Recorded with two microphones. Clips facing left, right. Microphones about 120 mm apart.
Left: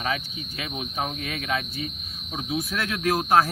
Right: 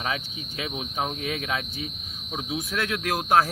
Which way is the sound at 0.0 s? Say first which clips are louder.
Left 2 dB; 20° right (ahead or behind).